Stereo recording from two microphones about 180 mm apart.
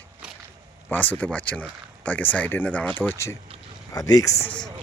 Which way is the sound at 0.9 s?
10° left (ahead or behind).